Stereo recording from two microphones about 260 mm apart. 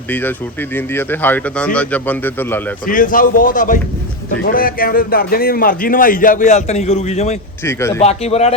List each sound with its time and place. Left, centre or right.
0.1 s speech: centre
2.8 s speech: left
7.6 s speech: centre
8.0 s speech: left